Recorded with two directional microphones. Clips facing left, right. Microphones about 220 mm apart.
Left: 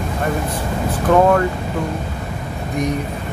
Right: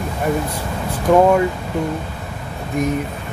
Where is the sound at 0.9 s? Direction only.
10° right (ahead or behind).